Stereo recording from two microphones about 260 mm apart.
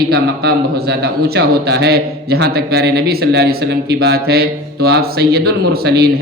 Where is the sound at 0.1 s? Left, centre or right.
Right.